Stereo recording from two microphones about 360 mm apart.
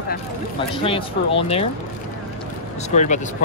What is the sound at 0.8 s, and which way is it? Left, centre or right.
Speech, centre.